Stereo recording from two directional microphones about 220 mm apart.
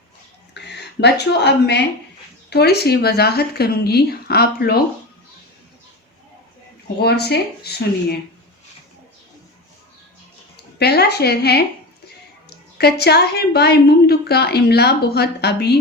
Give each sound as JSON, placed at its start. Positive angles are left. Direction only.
{"t": 0.5, "sound": "a sound", "side_deg": 50}
{"t": 1.2, "sound": "a woman's voice", "side_deg": 50}
{"t": 7.0, "sound": "a woman's voice", "side_deg": 45}
{"t": 10.8, "sound": "a woman's voice", "side_deg": 45}